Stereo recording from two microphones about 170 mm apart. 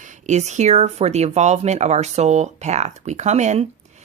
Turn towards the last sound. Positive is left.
turn(degrees=-40)  # may be behind; listen again after turning